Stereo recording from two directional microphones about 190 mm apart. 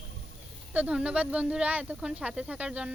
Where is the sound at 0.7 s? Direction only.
5° right (ahead or behind).